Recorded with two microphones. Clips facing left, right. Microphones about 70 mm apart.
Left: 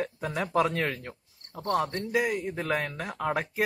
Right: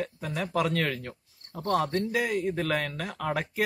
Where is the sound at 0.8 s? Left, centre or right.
Centre.